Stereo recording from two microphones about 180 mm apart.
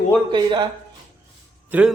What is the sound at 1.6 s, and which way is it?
Speech, 10° right (ahead or behind).